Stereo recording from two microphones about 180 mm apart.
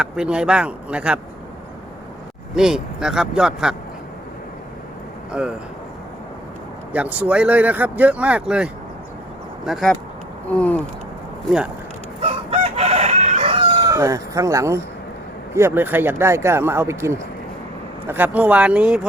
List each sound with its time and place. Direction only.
0.0 s speech: 5° right (ahead or behind)
2.6 s speech: 5° right (ahead or behind)
5.3 s speech: 5° right (ahead or behind)
6.9 s speech: 10° right (ahead or behind)
10.5 s a sound: 5° left (ahead or behind)
12.2 s chicken: 35° right (ahead or behind); by 14.8 s 15° right (ahead or behind)
15.5 s speech: 15° right (ahead or behind)